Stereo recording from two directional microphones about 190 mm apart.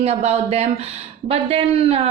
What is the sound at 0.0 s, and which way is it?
A woman's voice, 35° right (ahead or behind).